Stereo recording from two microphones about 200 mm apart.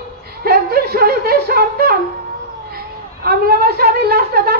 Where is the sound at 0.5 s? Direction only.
50° right (ahead or behind).